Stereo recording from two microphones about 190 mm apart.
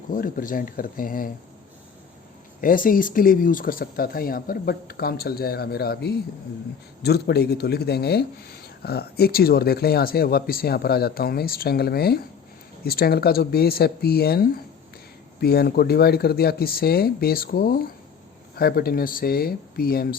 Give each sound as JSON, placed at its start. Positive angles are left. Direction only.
{"t": 0.1, "sound": "speech", "side_deg": 45}
{"t": 2.6, "sound": "speech", "side_deg": 45}